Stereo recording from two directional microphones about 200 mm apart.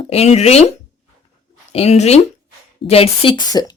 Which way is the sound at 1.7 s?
30° left (ahead or behind).